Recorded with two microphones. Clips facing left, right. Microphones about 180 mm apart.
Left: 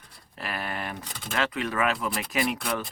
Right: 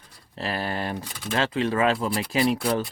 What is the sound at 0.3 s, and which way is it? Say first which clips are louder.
Speech: right 5 dB; 30° right (ahead or behind).